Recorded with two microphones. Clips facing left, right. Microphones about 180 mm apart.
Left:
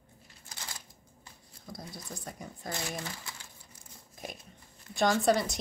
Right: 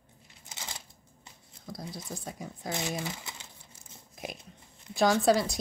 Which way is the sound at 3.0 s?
20° right (ahead or behind).